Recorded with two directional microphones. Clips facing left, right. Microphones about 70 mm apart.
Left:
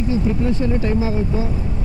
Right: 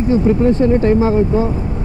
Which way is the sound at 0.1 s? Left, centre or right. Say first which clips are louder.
Right 8 dB; right.